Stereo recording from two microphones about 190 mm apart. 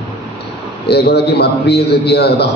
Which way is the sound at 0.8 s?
60° left (ahead or behind).